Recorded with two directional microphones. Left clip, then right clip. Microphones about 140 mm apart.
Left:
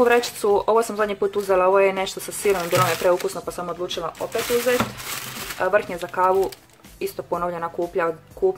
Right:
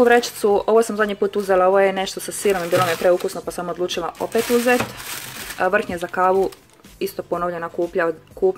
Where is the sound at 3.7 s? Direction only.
45° right (ahead or behind).